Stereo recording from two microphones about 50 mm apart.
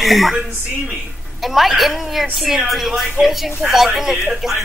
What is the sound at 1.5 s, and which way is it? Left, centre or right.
Speech, centre.